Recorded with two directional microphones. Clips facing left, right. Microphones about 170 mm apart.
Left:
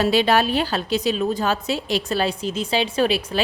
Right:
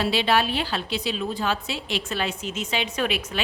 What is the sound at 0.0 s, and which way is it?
A woman's voice, 45° left (ahead or behind).